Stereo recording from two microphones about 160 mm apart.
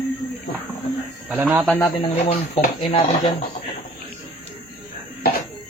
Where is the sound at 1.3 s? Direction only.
10° right (ahead or behind).